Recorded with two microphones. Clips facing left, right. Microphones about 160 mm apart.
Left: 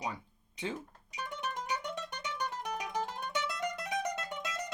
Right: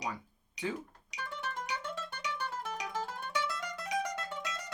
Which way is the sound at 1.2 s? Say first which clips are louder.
Left 1 dB; 15° left (ahead or behind).